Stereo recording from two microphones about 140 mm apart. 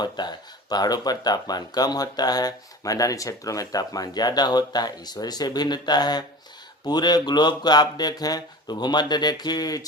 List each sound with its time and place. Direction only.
0.0 s speech: 30° left (ahead or behind)